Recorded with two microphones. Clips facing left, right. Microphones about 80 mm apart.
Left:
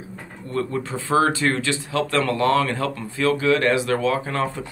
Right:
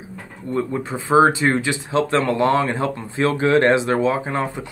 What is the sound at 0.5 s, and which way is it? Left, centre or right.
Speech, centre.